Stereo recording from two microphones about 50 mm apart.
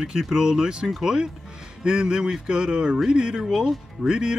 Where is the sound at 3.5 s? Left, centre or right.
Centre.